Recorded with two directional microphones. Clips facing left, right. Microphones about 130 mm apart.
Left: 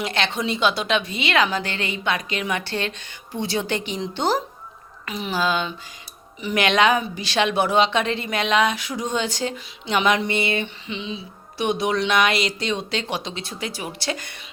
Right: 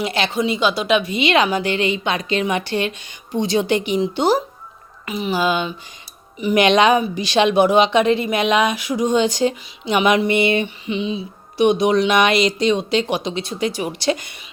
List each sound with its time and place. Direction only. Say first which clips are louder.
0.0 s a woman's voice: right 4 dB; 5° right (ahead or behind)